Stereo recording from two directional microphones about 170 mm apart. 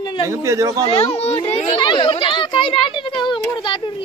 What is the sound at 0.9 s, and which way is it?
A child's voice, 40° left (ahead or behind).